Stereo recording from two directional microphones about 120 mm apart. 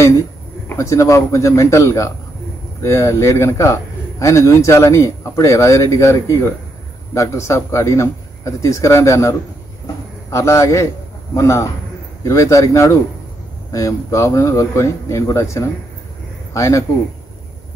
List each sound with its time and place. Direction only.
0.7 s speech: 25° left (ahead or behind)